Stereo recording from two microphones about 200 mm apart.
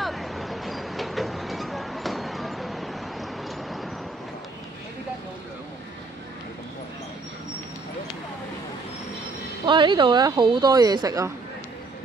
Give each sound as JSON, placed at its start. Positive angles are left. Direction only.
{"t": 0.0, "sound": "vehicle", "side_deg": 0}
{"t": 9.7, "sound": "speech", "side_deg": -25}